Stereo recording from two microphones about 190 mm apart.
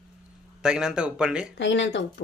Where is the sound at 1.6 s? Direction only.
75° left (ahead or behind).